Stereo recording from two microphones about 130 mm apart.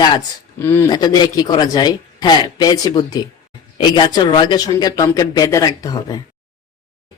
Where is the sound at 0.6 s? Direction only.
20° left (ahead or behind).